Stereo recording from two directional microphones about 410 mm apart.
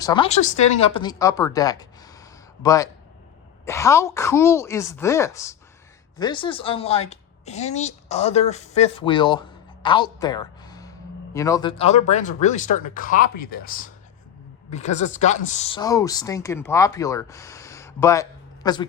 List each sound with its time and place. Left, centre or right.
0.0 s speech: centre
9.8 s a sound: centre
11.3 s speech: centre